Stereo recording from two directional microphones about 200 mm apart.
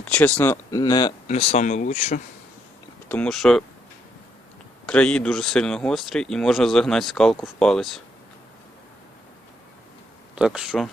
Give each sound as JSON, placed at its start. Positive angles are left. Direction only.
{"t": 0.0, "sound": "speech", "side_deg": 5}
{"t": 1.3, "sound": "speech", "side_deg": 30}
{"t": 3.1, "sound": "speech", "side_deg": 5}
{"t": 4.9, "sound": "speech", "side_deg": 5}
{"t": 10.3, "sound": "speech", "side_deg": -5}